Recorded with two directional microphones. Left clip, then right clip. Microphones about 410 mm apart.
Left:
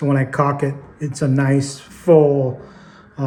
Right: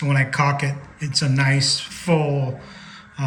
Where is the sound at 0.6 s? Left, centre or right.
Centre.